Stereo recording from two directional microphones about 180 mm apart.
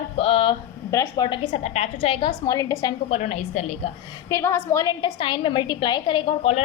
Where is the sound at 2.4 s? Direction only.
20° left (ahead or behind).